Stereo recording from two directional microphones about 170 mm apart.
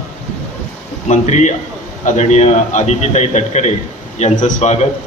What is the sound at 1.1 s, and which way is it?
A man's voice, 45° left (ahead or behind).